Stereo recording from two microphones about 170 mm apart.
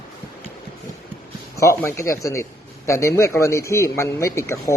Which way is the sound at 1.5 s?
15° left (ahead or behind).